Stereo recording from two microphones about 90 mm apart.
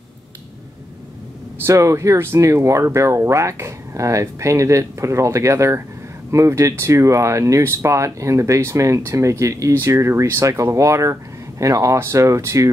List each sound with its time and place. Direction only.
1.7 s speech: 35° right (ahead or behind)